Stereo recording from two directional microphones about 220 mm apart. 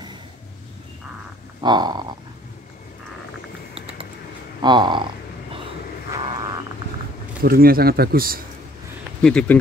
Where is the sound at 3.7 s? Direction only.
25° right (ahead or behind).